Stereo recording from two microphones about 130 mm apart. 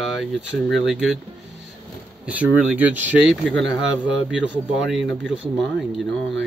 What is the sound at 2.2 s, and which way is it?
Speech, 10° right (ahead or behind).